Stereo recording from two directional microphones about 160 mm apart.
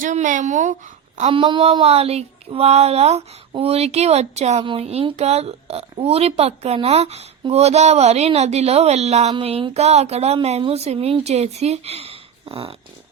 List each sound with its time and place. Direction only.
0.0 s speech: 50° right (ahead or behind)
1.2 s speech: 35° right (ahead or behind)